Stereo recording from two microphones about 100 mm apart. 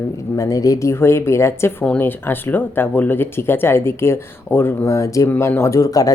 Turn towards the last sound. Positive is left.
turn(degrees=35)  # may be behind; listen again after turning